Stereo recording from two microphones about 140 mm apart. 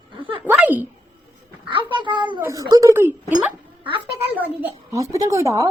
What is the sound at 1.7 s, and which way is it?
Speech, 35° right (ahead or behind).